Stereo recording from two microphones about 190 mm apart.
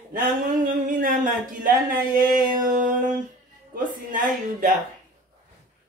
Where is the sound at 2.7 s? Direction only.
45° right (ahead or behind).